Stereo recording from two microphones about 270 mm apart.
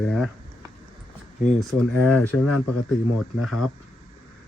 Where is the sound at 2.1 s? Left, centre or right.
Left.